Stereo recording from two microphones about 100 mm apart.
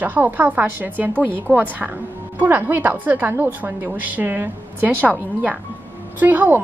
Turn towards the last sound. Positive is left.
turn(degrees=-15)  # may be behind; listen again after turning